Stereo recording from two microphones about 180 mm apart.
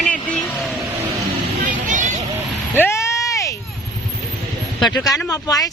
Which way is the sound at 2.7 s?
15° left (ahead or behind).